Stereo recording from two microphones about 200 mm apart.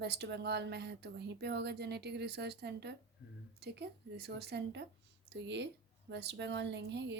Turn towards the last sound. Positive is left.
turn(degrees=-60)  # may be behind; listen again after turning